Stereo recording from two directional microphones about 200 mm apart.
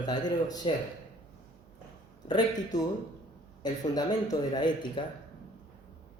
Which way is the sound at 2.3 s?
20° left (ahead or behind).